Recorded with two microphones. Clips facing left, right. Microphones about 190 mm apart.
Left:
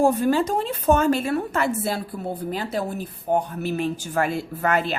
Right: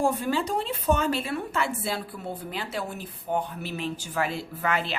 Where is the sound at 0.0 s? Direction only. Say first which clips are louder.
Left 6 dB; 45° left (ahead or behind).